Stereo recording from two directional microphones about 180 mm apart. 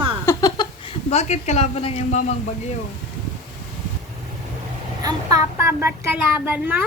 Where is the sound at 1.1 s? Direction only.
35° left (ahead or behind).